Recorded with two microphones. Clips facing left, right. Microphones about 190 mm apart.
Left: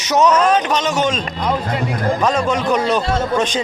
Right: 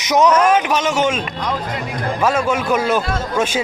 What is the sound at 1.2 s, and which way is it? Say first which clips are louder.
Speech: left 3 dB; 25° left (ahead or behind).